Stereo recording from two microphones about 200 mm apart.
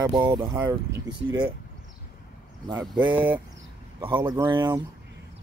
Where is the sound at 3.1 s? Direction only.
10° right (ahead or behind).